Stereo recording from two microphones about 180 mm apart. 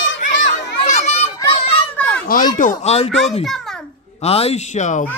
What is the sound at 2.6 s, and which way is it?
Speech, 40° left (ahead or behind).